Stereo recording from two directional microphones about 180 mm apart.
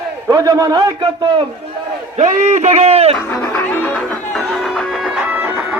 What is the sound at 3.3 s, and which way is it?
Music, 5° left (ahead or behind).